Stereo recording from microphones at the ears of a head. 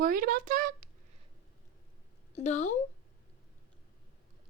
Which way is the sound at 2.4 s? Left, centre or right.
Left.